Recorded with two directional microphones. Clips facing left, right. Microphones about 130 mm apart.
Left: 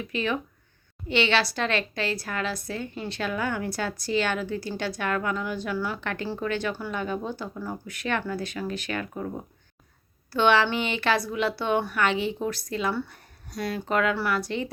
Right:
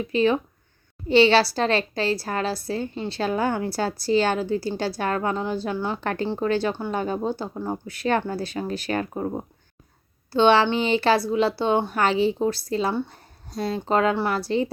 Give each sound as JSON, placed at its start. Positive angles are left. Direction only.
{"t": 0.0, "sound": "a woman's voice", "side_deg": -35}
{"t": 6.0, "sound": "a woman's voice", "side_deg": -35}